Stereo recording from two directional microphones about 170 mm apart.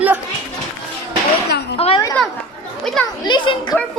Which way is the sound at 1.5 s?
75° left (ahead or behind).